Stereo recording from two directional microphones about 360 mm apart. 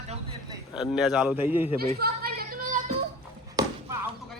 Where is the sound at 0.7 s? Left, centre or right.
Centre.